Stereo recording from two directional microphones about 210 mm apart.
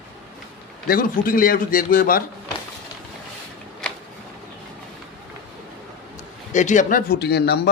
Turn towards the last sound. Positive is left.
turn(degrees=50)  # may be behind; listen again after turning